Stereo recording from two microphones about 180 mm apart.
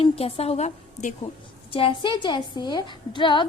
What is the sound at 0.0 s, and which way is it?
A woman's voice, 35° left (ahead or behind).